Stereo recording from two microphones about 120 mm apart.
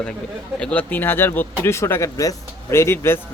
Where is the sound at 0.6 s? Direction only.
10° left (ahead or behind).